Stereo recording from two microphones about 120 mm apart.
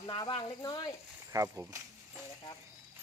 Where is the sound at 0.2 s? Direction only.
45° left (ahead or behind).